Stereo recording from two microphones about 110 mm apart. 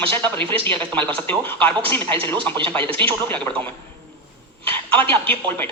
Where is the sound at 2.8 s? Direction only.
50° right (ahead or behind).